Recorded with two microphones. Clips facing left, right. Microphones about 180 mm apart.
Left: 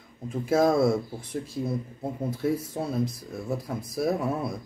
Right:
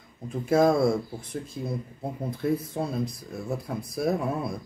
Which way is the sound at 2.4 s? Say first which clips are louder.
Right 1 dB; 5° left (ahead or behind).